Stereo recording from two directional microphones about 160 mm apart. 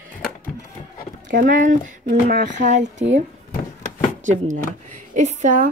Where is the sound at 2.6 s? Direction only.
50° right (ahead or behind).